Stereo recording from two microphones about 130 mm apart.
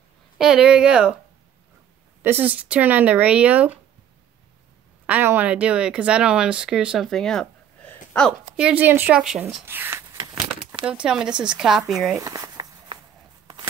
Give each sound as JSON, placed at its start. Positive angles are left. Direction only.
{"t": 0.4, "sound": "speech", "side_deg": -5}
{"t": 2.2, "sound": "speech", "side_deg": -15}
{"t": 5.0, "sound": "speech", "side_deg": -15}
{"t": 7.1, "sound": "a sound", "side_deg": 5}
{"t": 8.1, "sound": "speech", "side_deg": 5}
{"t": 8.5, "sound": "speech", "side_deg": -10}
{"t": 9.7, "sound": "a sound", "side_deg": -15}
{"t": 10.9, "sound": "speech", "side_deg": -5}
{"t": 12.2, "sound": "a sound", "side_deg": -25}